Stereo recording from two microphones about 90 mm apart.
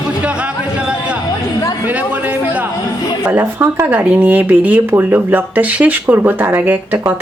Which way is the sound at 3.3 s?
25° right (ahead or behind).